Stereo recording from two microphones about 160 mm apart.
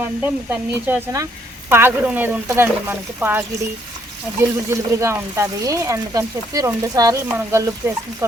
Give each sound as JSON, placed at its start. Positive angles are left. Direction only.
{"t": 0.0, "sound": "speech", "side_deg": -10}